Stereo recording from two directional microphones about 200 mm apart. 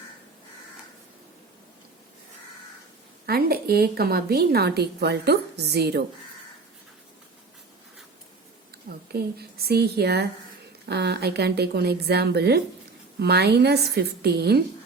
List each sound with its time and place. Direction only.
3.2 s a woman's voice: 50° right (ahead or behind)
9.1 s a woman's voice: 50° right (ahead or behind)